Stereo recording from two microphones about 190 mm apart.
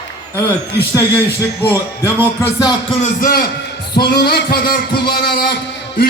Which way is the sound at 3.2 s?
50° left (ahead or behind).